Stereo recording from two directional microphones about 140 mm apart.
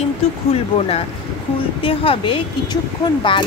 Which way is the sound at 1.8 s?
40° left (ahead or behind).